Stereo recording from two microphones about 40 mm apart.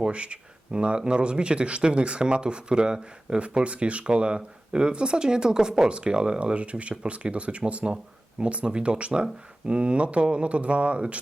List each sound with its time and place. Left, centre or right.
0.0 s speech: right